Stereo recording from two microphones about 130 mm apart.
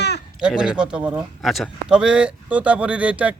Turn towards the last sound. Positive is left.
turn(degrees=-10)  # may be behind; listen again after turning